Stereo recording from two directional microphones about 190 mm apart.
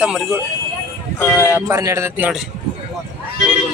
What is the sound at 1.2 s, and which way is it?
Speech, 10° left (ahead or behind).